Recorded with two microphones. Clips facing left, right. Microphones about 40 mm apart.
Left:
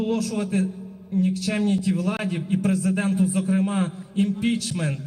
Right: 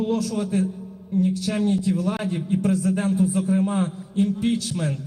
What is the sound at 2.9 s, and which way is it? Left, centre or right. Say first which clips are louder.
Speech: right 1 dB; left.